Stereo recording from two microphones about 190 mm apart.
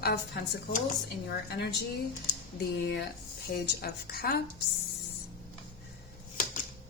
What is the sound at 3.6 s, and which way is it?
Speech, 55° left (ahead or behind).